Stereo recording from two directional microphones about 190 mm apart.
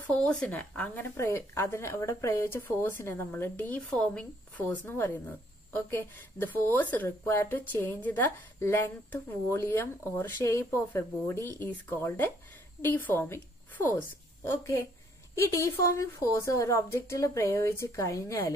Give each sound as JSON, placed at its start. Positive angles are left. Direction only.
{"t": 0.0, "sound": "a woman's voice", "side_deg": 5}